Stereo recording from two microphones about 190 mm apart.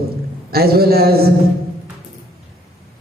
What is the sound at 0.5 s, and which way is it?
Speech, 55° right (ahead or behind).